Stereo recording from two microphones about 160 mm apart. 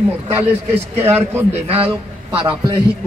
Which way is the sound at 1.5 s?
40° right (ahead or behind).